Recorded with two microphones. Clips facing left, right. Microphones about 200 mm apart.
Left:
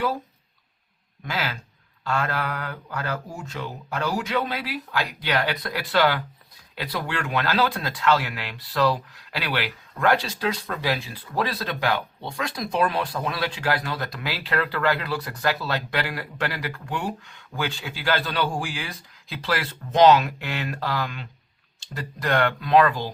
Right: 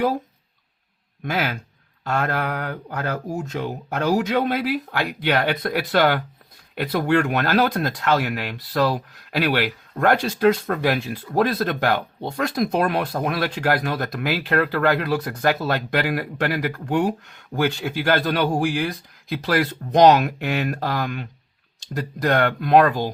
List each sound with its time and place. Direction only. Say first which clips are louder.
1.2 s speech: right 5 dB; 55° right (ahead or behind)